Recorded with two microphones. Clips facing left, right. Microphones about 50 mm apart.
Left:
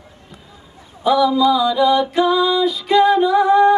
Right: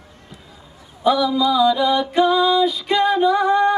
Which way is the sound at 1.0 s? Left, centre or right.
Centre.